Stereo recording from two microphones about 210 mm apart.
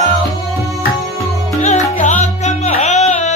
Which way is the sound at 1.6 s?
35° left (ahead or behind).